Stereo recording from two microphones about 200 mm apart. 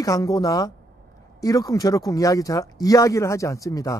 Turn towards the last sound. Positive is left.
turn(degrees=15)  # may be behind; listen again after turning